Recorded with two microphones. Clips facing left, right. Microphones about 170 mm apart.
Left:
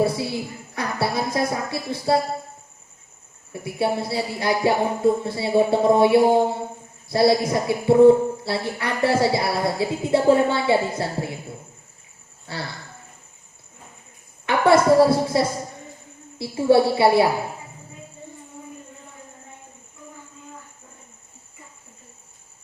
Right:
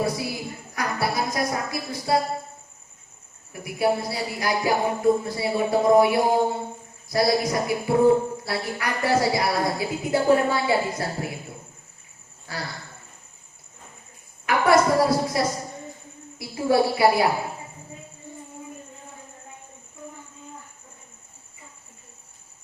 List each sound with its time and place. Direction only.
0.0 s a sound: 30° left (ahead or behind)
3.5 s speech: 25° left (ahead or behind)
12.5 s speech: 30° left (ahead or behind)
14.4 s speech: 25° left (ahead or behind)